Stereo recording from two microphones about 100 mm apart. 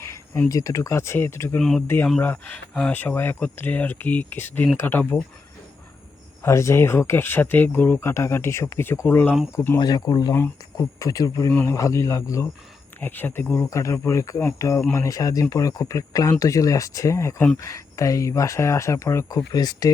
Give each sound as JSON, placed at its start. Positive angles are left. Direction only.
{"t": 0.0, "sound": "speech", "side_deg": 30}
{"t": 1.5, "sound": "speech", "side_deg": 5}
{"t": 2.2, "sound": "speech", "side_deg": 15}
{"t": 6.4, "sound": "speech", "side_deg": 30}
{"t": 9.8, "sound": "speech", "side_deg": 40}
{"t": 11.5, "sound": "speech", "side_deg": 25}
{"t": 13.0, "sound": "speech", "side_deg": 20}